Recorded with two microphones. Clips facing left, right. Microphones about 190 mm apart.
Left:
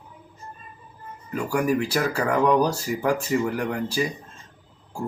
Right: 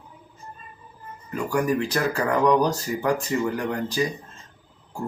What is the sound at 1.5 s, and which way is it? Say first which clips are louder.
Speech: even; 10° left (ahead or behind).